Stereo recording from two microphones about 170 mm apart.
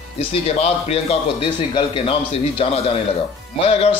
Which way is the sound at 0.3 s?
35° left (ahead or behind).